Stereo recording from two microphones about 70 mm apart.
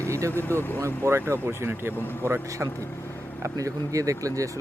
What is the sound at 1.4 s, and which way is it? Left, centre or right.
Speech, right.